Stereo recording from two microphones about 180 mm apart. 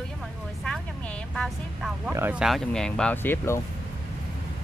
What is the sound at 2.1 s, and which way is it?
Speech, 10° right (ahead or behind).